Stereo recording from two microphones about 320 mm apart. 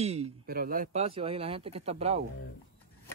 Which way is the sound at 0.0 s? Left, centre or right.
Centre.